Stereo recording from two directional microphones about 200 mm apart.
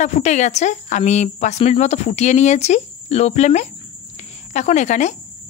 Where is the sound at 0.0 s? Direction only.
35° left (ahead or behind).